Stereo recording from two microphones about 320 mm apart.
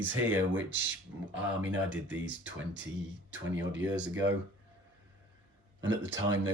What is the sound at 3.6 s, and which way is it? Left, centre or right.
Speech, right.